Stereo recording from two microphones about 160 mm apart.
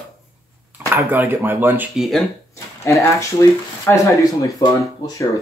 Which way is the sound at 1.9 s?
Centre (ahead or behind).